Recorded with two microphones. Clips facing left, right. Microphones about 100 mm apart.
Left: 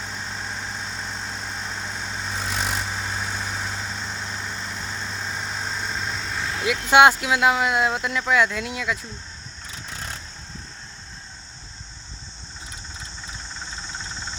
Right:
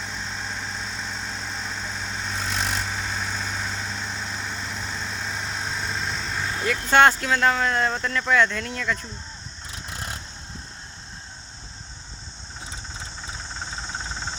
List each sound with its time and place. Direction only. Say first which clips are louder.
0.0 s vehicle: even; centre (ahead or behind)
9.9 s vehicle: right 1 dB; 5° right (ahead or behind)